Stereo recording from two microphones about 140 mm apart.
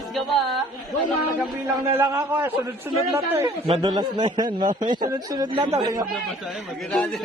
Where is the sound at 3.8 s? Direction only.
30° right (ahead or behind).